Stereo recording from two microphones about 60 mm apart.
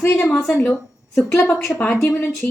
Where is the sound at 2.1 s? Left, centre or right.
Left.